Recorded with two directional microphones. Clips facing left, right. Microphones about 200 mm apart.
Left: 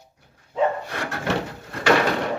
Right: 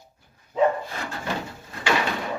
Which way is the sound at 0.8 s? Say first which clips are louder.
Left 4 dB; 75° left (ahead or behind).